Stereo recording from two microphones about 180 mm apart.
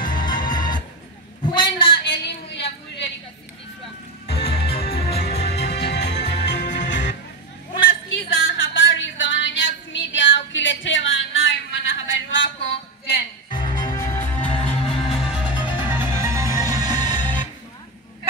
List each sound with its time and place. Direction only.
0.0 s music: 25° left (ahead or behind)
1.4 s a sound: 25° left (ahead or behind)
2.0 s a sound: 65° left (ahead or behind)
4.3 s music: 30° left (ahead or behind)
5.4 s music: 65° left (ahead or behind); by 12.7 s 90° left
13.5 s music: 25° left (ahead or behind)
14.1 s music: 10° left (ahead or behind)
15.0 s music: centre (ahead or behind); by 17.5 s 25° right (ahead or behind)